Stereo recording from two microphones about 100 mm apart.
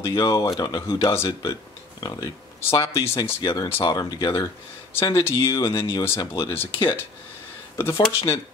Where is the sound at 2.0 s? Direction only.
35° left (ahead or behind).